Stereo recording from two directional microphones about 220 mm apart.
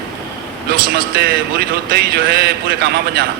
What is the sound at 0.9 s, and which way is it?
A man's voice, 45° right (ahead or behind).